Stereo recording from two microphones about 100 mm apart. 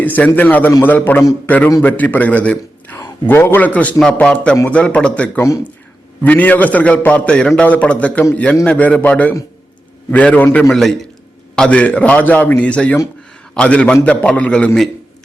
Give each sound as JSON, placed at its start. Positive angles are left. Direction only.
{"t": 0.0, "sound": "a man's voice", "side_deg": 15}
{"t": 10.7, "sound": "a man's voice", "side_deg": 0}